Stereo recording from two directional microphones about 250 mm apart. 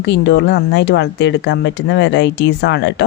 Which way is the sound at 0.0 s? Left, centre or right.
Left.